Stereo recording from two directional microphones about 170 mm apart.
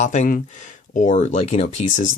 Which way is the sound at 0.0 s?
45° left (ahead or behind).